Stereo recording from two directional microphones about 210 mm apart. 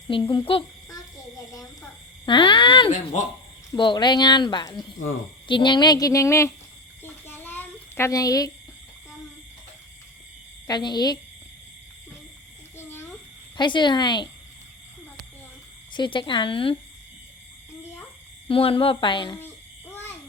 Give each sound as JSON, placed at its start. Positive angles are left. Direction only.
{"t": 0.1, "sound": "a child's voice", "side_deg": 20}
{"t": 2.2, "sound": "speech", "side_deg": 20}
{"t": 2.9, "sound": "speech", "side_deg": 35}
{"t": 3.7, "sound": "speech", "side_deg": 20}
{"t": 7.0, "sound": "a sound", "side_deg": 10}
{"t": 10.7, "sound": "speech", "side_deg": 20}
{"t": 12.7, "sound": "a sound", "side_deg": 10}
{"t": 13.6, "sound": "speech", "side_deg": 20}
{"t": 15.9, "sound": "speech", "side_deg": 20}
{"t": 18.4, "sound": "speech", "side_deg": 25}